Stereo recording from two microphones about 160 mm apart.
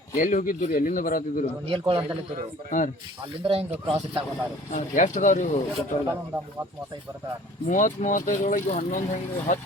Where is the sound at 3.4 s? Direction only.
35° right (ahead or behind).